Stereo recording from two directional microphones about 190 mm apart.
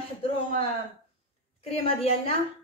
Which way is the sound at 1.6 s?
30° left (ahead or behind).